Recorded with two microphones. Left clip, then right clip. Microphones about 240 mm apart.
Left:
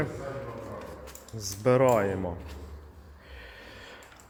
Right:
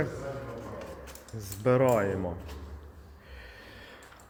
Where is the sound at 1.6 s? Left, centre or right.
Centre.